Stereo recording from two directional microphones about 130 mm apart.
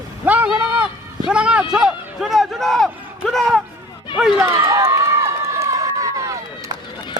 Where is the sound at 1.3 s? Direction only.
10° right (ahead or behind).